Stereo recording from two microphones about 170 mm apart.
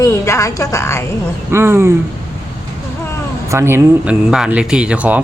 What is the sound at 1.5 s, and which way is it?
Speech, 15° right (ahead or behind).